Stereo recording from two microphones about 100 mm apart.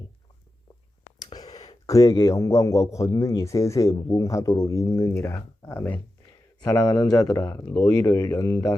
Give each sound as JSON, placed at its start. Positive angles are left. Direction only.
{"t": 1.2, "sound": "a man's voice", "side_deg": 45}